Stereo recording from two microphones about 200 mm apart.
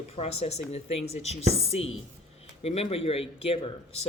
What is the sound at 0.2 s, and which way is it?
Speech, 30° left (ahead or behind).